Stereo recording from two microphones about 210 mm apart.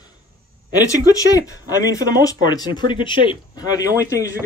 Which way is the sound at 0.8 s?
15° left (ahead or behind).